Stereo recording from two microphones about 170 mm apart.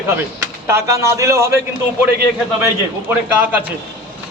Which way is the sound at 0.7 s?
15° right (ahead or behind).